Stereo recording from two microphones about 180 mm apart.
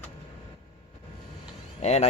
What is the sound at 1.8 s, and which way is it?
Speech, 35° left (ahead or behind).